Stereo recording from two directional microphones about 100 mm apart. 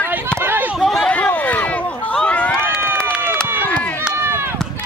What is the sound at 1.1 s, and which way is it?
Speech, 15° left (ahead or behind).